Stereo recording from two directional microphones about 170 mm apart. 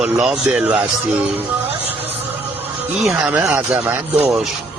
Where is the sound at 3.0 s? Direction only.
5° right (ahead or behind).